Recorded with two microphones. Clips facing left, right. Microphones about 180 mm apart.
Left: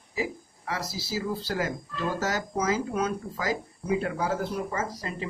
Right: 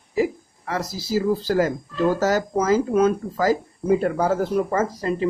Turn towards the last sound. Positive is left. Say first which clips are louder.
# right 10 dB
turn(degrees=-50)  # may be behind; listen again after turning